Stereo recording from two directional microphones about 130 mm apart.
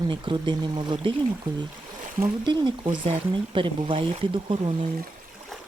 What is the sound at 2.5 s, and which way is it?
Speech, 40° right (ahead or behind).